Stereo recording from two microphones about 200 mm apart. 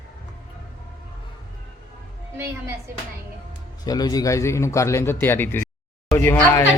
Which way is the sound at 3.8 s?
20° left (ahead or behind).